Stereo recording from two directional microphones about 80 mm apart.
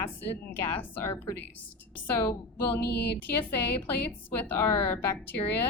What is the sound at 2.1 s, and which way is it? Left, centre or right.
Speech, left.